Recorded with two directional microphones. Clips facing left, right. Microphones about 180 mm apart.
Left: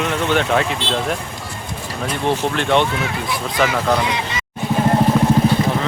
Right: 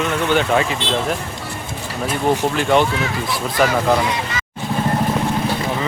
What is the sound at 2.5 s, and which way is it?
Speech, 5° right (ahead or behind).